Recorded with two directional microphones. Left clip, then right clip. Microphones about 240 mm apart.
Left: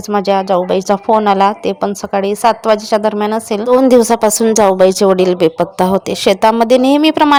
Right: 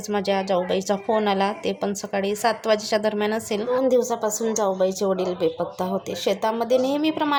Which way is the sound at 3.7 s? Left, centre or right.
Left.